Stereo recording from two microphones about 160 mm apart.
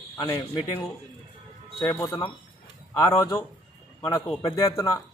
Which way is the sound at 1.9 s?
15° left (ahead or behind).